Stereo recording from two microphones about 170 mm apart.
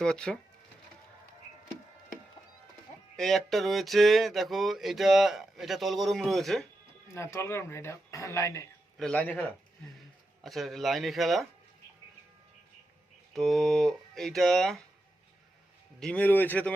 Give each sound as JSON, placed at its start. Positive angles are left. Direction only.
{"t": 0.0, "sound": "speech", "side_deg": 5}
{"t": 3.2, "sound": "speech", "side_deg": 0}
{"t": 7.1, "sound": "speech", "side_deg": 15}
{"t": 9.0, "sound": "speech", "side_deg": 5}
{"t": 13.3, "sound": "speech", "side_deg": 0}
{"t": 16.0, "sound": "speech", "side_deg": 5}